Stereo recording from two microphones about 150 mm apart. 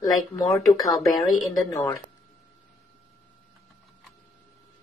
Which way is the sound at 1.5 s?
20° left (ahead or behind).